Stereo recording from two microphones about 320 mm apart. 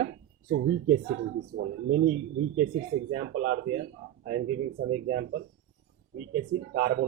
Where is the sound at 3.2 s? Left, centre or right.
Right.